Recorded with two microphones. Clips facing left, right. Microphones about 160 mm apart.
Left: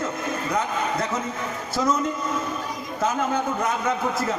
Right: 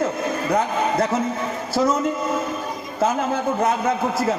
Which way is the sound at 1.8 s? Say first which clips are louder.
Right 4 dB; 35° right (ahead or behind).